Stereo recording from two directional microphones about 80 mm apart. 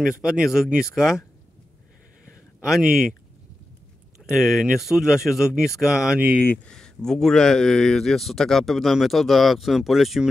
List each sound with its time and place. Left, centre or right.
0.2 s speech: centre
2.6 s speech: centre
4.3 s speech: centre
6.4 s speech: left
6.7 s speech: centre